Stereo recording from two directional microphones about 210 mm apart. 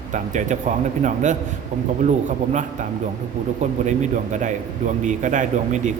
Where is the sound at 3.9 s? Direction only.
35° right (ahead or behind).